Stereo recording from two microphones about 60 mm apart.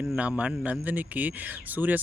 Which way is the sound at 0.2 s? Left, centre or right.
Right.